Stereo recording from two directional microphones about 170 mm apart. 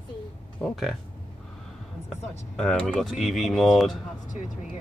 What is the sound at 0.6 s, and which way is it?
Speech, centre (ahead or behind).